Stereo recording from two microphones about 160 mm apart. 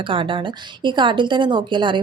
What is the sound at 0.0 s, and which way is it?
A woman's voice, 30° right (ahead or behind).